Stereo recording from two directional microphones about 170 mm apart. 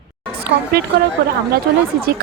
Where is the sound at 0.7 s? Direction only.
65° right (ahead or behind).